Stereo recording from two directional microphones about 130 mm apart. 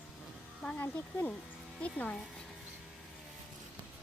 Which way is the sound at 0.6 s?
5° left (ahead or behind).